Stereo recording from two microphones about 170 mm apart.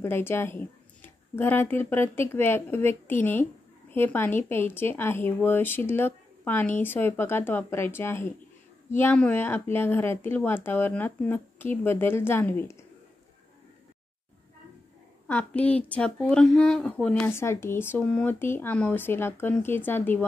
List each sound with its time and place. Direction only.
0.0 s speech: 15° left (ahead or behind)
15.2 s speech: 10° left (ahead or behind)